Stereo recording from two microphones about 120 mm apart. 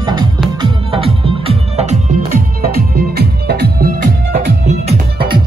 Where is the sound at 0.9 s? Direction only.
50° right (ahead or behind); by 2.2 s 70° right (ahead or behind).